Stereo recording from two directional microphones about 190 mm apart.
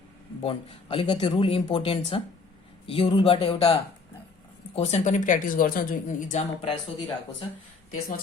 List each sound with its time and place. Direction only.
0.4 s speech: 30° left (ahead or behind)